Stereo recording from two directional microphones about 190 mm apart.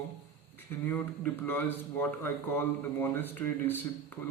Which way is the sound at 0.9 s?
10° left (ahead or behind).